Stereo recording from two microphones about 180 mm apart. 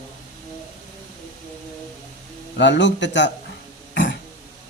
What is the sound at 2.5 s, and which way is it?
Speech, 75° left (ahead or behind).